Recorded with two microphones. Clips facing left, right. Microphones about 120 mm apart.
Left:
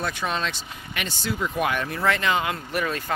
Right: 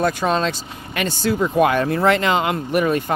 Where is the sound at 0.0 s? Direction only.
40° right (ahead or behind).